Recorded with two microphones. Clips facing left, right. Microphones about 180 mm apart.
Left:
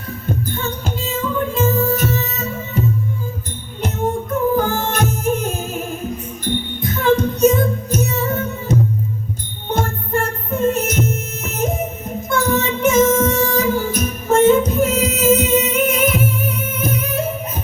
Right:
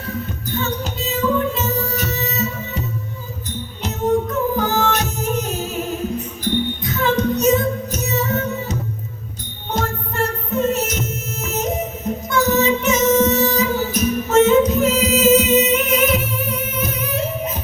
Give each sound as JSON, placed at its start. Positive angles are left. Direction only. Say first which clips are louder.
{"t": 0.3, "sound": "music", "louder": "left 6 dB", "side_deg": 50}
{"t": 4.6, "sound": "music", "louder": "even", "side_deg": 50}